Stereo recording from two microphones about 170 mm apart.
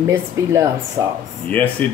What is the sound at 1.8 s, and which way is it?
Speech, 10° left (ahead or behind).